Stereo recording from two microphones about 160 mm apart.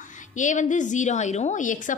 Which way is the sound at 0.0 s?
50° left (ahead or behind).